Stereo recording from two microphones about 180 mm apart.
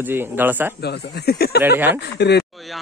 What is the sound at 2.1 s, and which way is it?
Speech, 70° left (ahead or behind).